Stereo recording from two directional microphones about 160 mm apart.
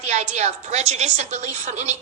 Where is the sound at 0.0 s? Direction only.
45° right (ahead or behind).